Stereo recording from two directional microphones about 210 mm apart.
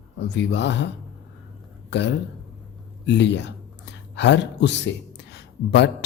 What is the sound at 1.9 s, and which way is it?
Speech, 55° left (ahead or behind).